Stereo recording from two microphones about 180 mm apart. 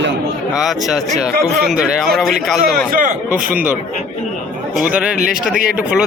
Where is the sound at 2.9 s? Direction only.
50° right (ahead or behind).